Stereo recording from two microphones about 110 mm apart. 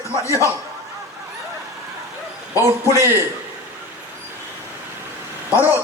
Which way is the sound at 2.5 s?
25° right (ahead or behind).